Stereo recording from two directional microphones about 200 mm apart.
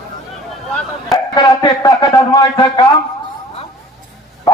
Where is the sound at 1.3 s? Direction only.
20° left (ahead or behind).